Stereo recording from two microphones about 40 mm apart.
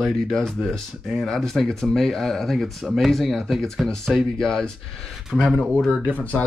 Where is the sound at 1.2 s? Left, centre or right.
Centre.